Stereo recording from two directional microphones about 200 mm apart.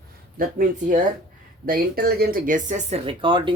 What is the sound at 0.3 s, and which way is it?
Speech, 45° right (ahead or behind).